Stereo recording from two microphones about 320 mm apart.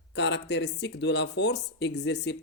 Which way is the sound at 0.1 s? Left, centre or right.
Left.